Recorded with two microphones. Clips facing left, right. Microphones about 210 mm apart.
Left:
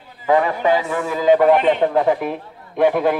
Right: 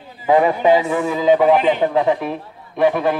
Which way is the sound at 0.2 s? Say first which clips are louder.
Right 2 dB; 15° right (ahead or behind).